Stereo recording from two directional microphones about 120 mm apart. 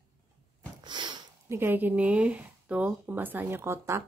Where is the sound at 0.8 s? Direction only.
40° right (ahead or behind).